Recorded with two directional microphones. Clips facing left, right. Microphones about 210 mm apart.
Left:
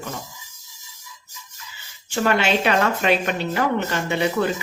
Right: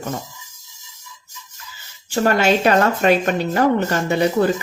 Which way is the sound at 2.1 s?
40° right (ahead or behind).